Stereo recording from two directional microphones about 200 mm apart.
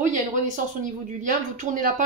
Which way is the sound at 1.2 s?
40° right (ahead or behind).